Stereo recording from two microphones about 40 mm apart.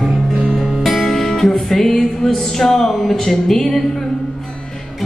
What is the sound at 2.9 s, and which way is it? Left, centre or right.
Speech, centre.